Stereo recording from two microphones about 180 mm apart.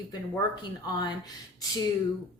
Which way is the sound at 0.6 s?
25° left (ahead or behind).